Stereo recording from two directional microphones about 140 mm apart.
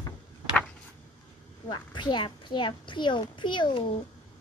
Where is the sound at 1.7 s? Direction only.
30° left (ahead or behind).